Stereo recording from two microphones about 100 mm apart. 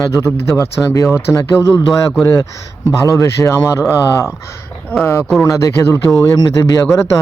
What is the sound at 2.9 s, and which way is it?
Speech, 35° left (ahead or behind).